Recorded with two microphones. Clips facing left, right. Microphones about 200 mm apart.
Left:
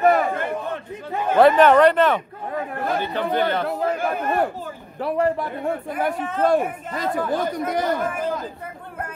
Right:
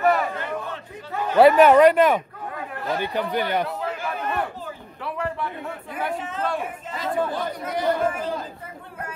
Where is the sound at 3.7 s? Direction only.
45° left (ahead or behind).